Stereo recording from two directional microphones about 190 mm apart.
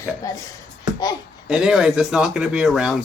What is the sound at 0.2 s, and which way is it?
Speech, 20° left (ahead or behind).